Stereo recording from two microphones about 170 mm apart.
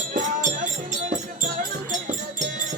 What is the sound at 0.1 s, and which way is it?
Music, 50° right (ahead or behind).